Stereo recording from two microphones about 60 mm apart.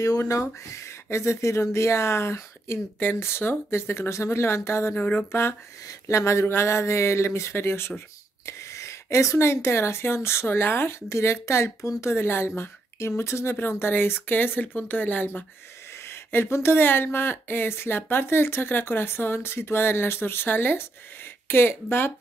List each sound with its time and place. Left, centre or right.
0.2 s speech: left
4.9 s speech: left
5.3 s speech: left
5.9 s speech: left
8.5 s speech: left
16.0 s speech: left